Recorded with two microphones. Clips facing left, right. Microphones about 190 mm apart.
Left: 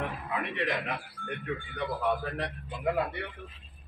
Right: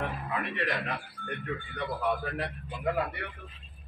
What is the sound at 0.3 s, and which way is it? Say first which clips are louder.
A man's voice: left 2 dB; 10° left (ahead or behind).